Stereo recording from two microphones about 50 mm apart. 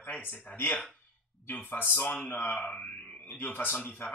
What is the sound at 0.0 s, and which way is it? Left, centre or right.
Speech, left.